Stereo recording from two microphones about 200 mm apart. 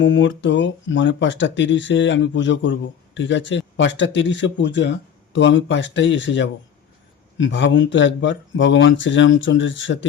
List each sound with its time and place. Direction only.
0.0 s speech: 70° left (ahead or behind)